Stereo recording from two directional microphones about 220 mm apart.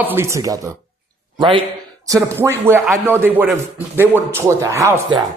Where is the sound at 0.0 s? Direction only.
10° right (ahead or behind).